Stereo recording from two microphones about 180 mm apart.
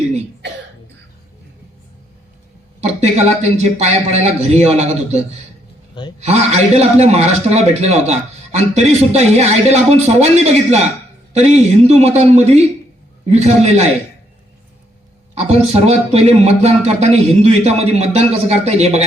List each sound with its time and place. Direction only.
2.8 s a man's voice: 35° right (ahead or behind)
5.9 s a sound: 25° left (ahead or behind)
6.1 s a man's voice: 40° right (ahead or behind)
15.4 s a man's voice: 35° right (ahead or behind)